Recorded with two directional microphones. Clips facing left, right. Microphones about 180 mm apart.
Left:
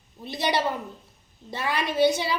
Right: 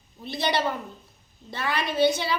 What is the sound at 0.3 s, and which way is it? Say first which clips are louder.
A child's voice: even; 15° left (ahead or behind).